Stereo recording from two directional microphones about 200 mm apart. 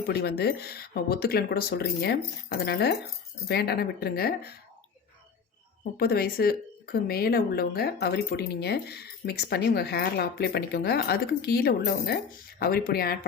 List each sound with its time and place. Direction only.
0.1 s a woman's voice: 55° left (ahead or behind)
6.0 s a woman's voice: 50° left (ahead or behind)